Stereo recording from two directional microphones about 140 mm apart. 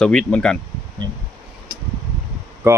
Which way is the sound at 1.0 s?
30° right (ahead or behind).